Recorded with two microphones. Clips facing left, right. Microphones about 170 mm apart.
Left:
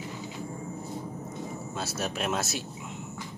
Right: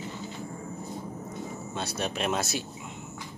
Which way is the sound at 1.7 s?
5° left (ahead or behind).